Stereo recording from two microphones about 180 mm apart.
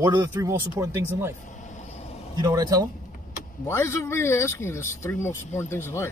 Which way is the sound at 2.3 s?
20° right (ahead or behind).